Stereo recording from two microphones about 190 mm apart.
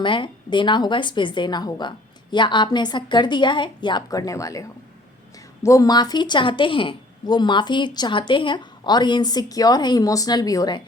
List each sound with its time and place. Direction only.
0.0 s a woman's voice: 25° left (ahead or behind)
5.6 s a woman's voice: 20° left (ahead or behind)